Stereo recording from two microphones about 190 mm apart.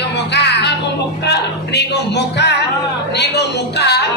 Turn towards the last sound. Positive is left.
turn(degrees=65)  # may be behind; listen again after turning